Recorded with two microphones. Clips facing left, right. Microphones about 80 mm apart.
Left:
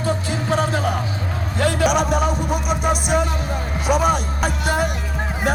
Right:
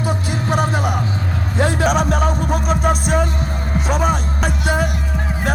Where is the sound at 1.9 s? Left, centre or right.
Centre.